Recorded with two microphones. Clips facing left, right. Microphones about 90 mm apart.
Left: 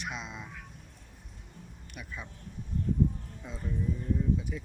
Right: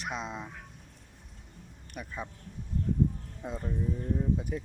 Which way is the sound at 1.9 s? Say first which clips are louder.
Right 5 dB; 35° right (ahead or behind).